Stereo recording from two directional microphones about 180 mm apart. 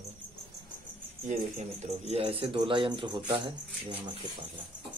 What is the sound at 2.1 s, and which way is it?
Speech, 30° right (ahead or behind).